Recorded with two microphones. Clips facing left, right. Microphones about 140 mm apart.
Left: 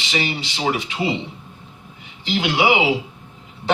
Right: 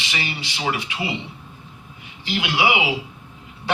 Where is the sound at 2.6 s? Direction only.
30° left (ahead or behind).